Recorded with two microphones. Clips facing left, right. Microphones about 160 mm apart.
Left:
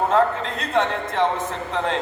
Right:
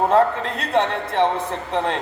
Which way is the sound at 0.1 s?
35° right (ahead or behind).